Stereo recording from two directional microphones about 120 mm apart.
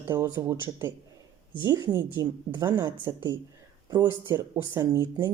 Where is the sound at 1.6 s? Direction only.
35° right (ahead or behind).